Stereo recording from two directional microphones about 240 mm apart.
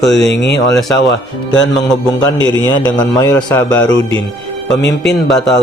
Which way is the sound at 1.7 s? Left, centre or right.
Centre.